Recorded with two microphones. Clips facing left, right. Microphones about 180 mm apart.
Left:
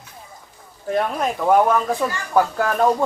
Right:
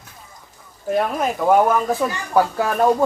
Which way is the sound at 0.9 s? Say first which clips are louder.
Right 1 dB; 5° right (ahead or behind).